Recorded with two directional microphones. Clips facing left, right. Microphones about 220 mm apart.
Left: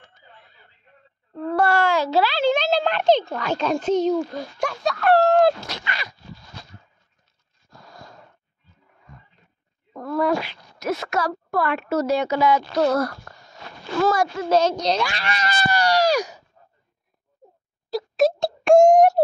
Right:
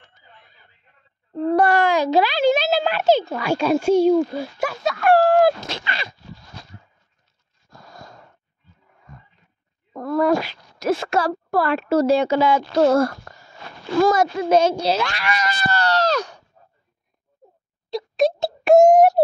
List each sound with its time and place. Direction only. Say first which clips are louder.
1.5 s a child's voice: right 2 dB; 15° right (ahead or behind)
5.6 s speech: right 2 dB; 25° right (ahead or behind)
7.7 s a sound: right 2 dB; 45° right (ahead or behind)
9.9 s speech: right 3 dB; 45° right (ahead or behind); by 12.8 s 30° right (ahead or behind)
13.3 s a sound: right 1 dB; 20° right (ahead or behind)
14.0 s a child's voice: right 2 dB; 20° right (ahead or behind)
15.1 s speech: right 3 dB; 30° left (ahead or behind)
15.7 s speech: left 1 dB; 15° left (ahead or behind)
17.8 s a sound: even; centre (ahead or behind)